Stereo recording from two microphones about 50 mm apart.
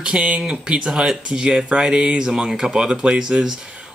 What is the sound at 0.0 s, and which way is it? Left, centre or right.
Speech, right.